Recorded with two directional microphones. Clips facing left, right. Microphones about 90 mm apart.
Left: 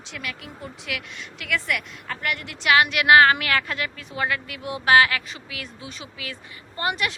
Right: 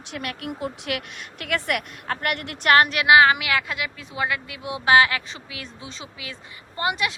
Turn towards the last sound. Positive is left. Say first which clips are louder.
# right 1 dB
turn(degrees=-20)  # may be behind; listen again after turning